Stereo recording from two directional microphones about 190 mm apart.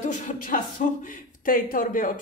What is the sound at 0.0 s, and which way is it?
Speech, 40° left (ahead or behind).